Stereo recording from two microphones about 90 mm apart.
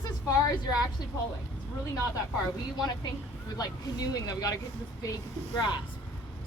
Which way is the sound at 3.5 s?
45° left (ahead or behind).